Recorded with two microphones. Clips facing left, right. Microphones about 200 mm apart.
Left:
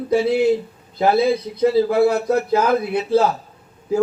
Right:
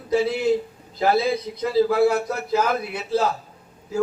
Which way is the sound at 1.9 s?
60° left (ahead or behind).